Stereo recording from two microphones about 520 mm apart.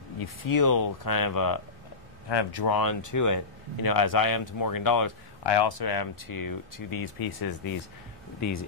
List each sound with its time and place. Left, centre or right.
0.2 s speech: left
5.4 s speech: left